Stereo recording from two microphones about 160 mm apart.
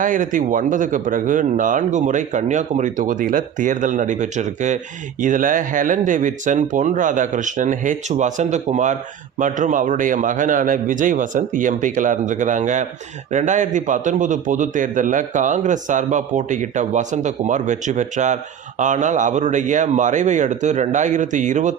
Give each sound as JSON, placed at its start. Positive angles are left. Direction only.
{"t": 0.0, "sound": "a man's voice", "side_deg": -55}